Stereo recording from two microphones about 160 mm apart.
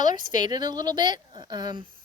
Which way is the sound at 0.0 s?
25° right (ahead or behind).